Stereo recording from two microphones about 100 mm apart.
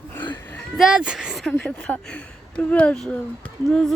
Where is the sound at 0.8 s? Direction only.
5° right (ahead or behind).